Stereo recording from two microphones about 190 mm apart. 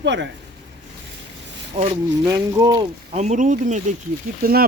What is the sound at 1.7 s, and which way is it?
Speech, 30° right (ahead or behind).